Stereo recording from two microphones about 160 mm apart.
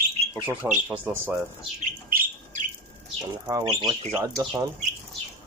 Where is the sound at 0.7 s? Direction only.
5° right (ahead or behind).